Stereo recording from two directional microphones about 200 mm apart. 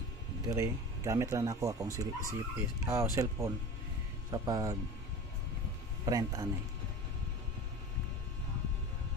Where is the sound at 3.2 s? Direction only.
15° right (ahead or behind).